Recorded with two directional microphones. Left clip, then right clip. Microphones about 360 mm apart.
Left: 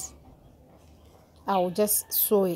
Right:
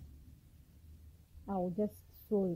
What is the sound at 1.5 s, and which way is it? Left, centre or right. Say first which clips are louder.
Speech: left 13 dB; centre.